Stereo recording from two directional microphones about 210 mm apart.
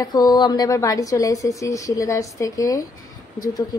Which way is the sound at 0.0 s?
20° left (ahead or behind).